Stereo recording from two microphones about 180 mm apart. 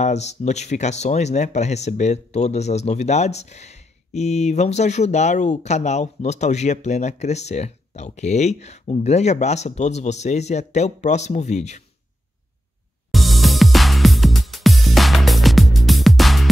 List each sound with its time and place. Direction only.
0.0 s speech: 40° left (ahead or behind)
13.1 s music: centre (ahead or behind)